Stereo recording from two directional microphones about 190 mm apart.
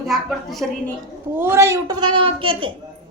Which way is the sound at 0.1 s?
Centre (ahead or behind).